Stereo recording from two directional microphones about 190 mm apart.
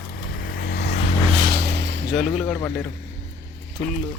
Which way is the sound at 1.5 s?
65° right (ahead or behind).